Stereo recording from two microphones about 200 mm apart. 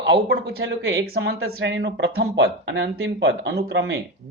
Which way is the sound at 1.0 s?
50° right (ahead or behind).